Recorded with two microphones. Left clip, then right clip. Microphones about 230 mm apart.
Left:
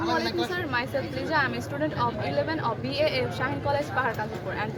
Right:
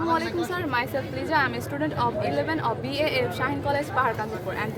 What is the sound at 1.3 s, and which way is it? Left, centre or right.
Speech, centre.